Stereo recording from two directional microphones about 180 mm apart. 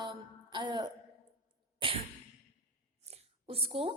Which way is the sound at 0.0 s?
25° right (ahead or behind).